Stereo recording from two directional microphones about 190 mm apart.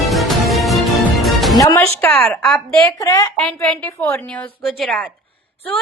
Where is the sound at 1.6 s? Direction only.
15° left (ahead or behind).